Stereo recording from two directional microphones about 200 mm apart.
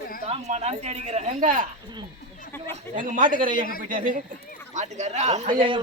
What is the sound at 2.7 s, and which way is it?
Speech, 40° right (ahead or behind).